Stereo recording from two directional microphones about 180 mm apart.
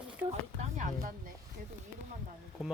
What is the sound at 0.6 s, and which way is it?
Speech, 45° right (ahead or behind).